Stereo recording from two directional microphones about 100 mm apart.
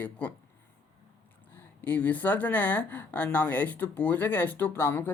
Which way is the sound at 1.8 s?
15° left (ahead or behind).